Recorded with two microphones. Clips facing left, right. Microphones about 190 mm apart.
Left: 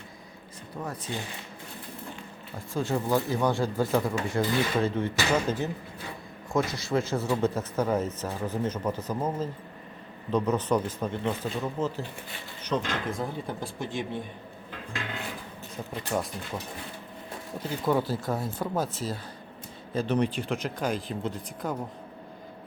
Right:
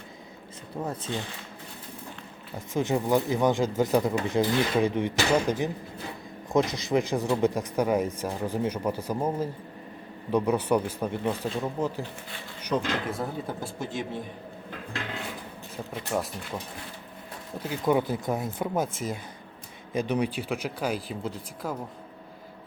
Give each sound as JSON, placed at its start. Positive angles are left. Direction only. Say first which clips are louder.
{"t": 0.8, "sound": "speech", "louder": "right 3 dB", "side_deg": -25}
{"t": 2.7, "sound": "speech", "louder": "right 2 dB", "side_deg": -20}
{"t": 16.1, "sound": "speech", "louder": "right 1 dB", "side_deg": -5}
{"t": 17.6, "sound": "speech", "louder": "right 2 dB", "side_deg": -10}
{"t": 19.9, "sound": "speech", "louder": "even", "side_deg": -15}